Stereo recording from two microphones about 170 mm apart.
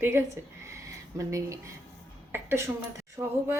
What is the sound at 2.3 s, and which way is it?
A woman's voice, 15° right (ahead or behind).